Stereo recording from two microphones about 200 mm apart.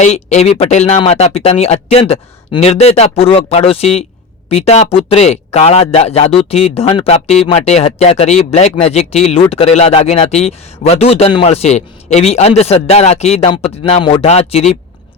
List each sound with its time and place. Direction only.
0.0 s speech: 35° left (ahead or behind)